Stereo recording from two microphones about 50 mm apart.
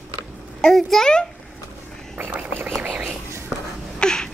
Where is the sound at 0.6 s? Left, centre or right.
Centre.